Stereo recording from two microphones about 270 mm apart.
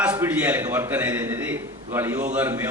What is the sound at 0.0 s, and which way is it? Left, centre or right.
A man's voice, centre.